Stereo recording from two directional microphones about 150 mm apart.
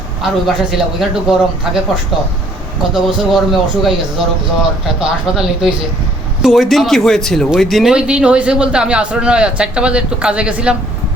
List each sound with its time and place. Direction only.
0.2 s a man's voice: centre (ahead or behind)
2.9 s a man's voice: centre (ahead or behind)
4.9 s a man's voice: 5° right (ahead or behind)